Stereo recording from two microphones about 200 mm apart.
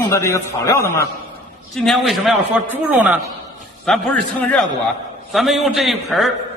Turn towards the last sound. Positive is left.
turn(degrees=0)  # may be behind; listen again after turning